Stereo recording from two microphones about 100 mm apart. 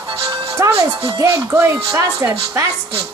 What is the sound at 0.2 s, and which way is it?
Music, 35° right (ahead or behind).